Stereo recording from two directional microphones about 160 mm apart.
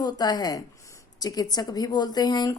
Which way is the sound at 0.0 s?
25° left (ahead or behind).